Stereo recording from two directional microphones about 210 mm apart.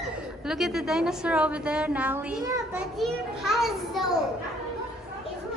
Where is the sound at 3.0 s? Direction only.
Centre (ahead or behind).